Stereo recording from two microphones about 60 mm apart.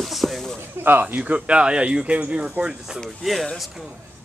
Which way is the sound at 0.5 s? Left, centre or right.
Right.